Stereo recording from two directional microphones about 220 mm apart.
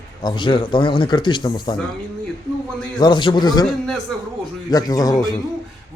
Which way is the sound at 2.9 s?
20° left (ahead or behind).